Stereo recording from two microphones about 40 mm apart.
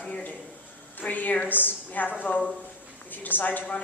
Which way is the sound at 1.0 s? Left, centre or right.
Left.